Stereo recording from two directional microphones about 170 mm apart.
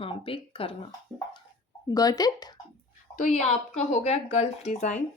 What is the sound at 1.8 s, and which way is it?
Speech, 20° left (ahead or behind).